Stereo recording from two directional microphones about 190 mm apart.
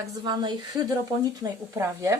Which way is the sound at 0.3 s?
25° right (ahead or behind).